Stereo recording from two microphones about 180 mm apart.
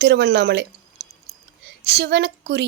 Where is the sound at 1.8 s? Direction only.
70° right (ahead or behind).